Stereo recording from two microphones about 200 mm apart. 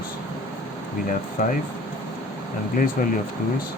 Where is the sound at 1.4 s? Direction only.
40° left (ahead or behind).